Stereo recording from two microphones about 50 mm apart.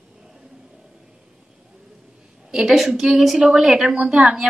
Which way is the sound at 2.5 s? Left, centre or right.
Centre.